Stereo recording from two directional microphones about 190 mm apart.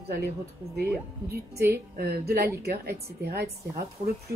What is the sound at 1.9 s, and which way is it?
Speech, 55° right (ahead or behind).